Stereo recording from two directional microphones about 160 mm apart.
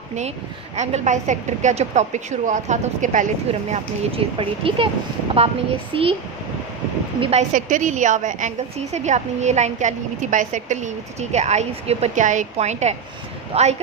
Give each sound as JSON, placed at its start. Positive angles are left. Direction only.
{"t": 0.7, "sound": "a woman's voice", "side_deg": -45}
{"t": 3.7, "sound": "speech", "side_deg": -35}
{"t": 5.9, "sound": "speech", "side_deg": -35}
{"t": 7.2, "sound": "speech", "side_deg": -40}
{"t": 7.5, "sound": "a woman's voice", "side_deg": -55}